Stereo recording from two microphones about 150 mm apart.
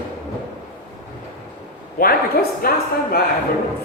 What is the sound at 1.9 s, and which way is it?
A woman's voice, 80° left.